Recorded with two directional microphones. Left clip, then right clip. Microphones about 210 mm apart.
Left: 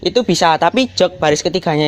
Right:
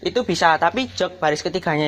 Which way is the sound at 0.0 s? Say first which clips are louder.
Left 5 dB; 45° left (ahead or behind).